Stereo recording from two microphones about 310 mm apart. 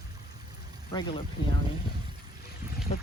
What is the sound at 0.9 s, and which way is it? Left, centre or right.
Speech, centre.